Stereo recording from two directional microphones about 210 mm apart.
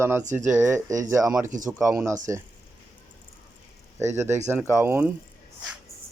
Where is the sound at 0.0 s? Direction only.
10° right (ahead or behind).